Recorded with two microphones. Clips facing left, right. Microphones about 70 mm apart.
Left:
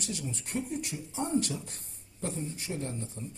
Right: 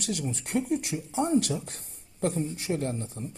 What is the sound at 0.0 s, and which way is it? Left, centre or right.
Speech, right.